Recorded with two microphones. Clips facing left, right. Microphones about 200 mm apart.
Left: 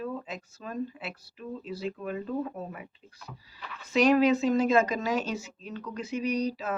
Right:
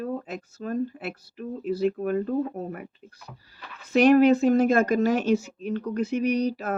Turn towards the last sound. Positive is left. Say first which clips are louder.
# right 5 dB
turn(degrees=-60)  # may be behind; listen again after turning